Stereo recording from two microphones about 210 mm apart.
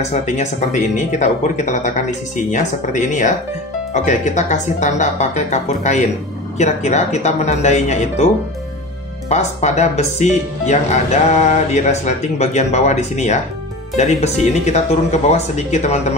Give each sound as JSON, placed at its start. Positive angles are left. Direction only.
{"t": 0.0, "sound": "speech", "side_deg": 35}
{"t": 9.3, "sound": "speech", "side_deg": 30}